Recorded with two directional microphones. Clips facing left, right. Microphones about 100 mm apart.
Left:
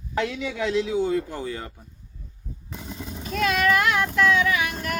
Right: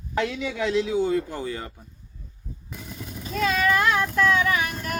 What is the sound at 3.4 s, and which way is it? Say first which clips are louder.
Vehicle: even; 30° right (ahead or behind).